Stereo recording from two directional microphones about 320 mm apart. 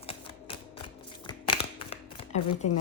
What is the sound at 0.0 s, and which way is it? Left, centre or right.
Typewriter, centre.